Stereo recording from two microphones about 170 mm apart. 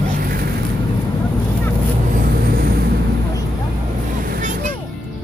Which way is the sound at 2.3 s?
60° right (ahead or behind).